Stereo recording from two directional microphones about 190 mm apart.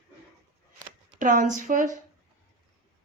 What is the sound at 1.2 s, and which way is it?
Speech, 40° right (ahead or behind).